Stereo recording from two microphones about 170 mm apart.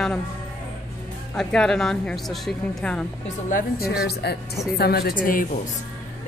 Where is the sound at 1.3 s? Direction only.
5° left (ahead or behind).